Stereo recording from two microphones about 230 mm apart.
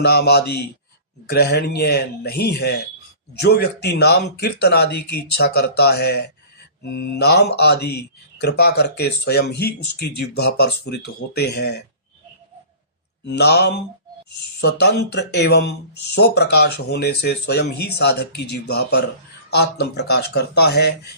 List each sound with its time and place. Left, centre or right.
0.0 s speech: left
13.2 s speech: left